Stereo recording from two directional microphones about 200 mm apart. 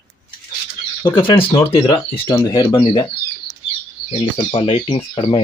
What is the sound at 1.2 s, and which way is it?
Speech, 25° left (ahead or behind).